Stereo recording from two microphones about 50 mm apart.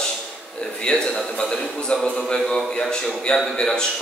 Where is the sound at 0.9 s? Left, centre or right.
Centre.